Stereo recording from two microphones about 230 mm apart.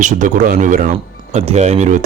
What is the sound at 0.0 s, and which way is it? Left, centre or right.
Speech, right.